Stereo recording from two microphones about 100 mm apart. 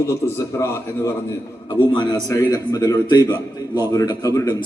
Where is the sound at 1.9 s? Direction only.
45° left (ahead or behind).